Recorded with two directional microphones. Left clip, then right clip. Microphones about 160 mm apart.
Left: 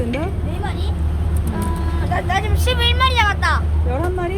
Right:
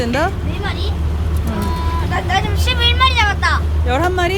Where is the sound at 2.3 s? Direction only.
40° left (ahead or behind).